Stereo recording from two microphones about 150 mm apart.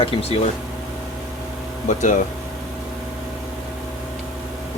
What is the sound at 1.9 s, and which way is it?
Speech, 55° left (ahead or behind).